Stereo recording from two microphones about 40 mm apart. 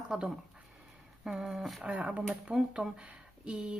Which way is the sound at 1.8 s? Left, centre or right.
Right.